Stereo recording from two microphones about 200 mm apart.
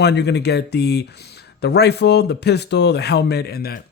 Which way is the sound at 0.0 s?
55° left (ahead or behind).